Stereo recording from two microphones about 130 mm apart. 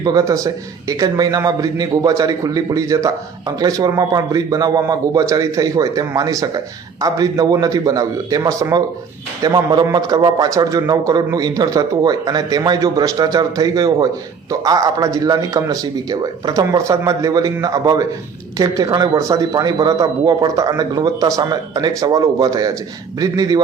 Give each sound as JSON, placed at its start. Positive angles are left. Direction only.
{"t": 0.0, "sound": "a man's voice", "side_deg": -25}